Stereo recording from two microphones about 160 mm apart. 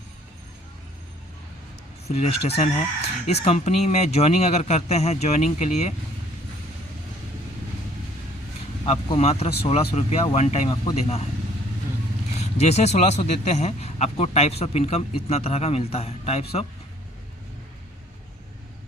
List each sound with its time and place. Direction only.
2.0 s speech: 40° left (ahead or behind)
8.8 s a man's voice: 35° left (ahead or behind)
12.4 s a man's voice: 40° left (ahead or behind)